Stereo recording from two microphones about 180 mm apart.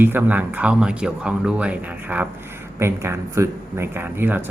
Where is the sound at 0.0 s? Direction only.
10° right (ahead or behind).